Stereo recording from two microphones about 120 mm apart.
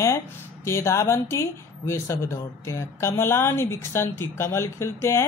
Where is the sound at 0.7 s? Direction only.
25° left (ahead or behind).